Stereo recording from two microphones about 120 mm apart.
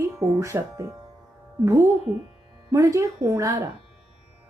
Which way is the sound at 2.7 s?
25° right (ahead or behind).